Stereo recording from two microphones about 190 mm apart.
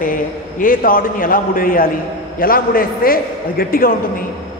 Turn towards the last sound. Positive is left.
turn(degrees=50)  # may be behind; listen again after turning